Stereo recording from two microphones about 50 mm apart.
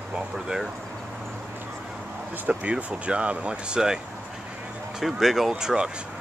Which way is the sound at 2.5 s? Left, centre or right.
Right.